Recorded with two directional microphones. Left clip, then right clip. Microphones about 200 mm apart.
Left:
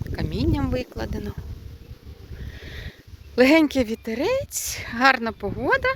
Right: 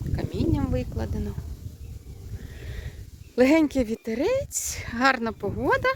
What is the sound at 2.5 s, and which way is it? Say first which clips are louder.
Sniff: left 6 dB; 10° right (ahead or behind).